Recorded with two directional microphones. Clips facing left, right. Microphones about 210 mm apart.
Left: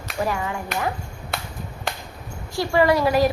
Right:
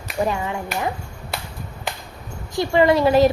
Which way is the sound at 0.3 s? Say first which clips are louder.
Right 2 dB; 20° right (ahead or behind).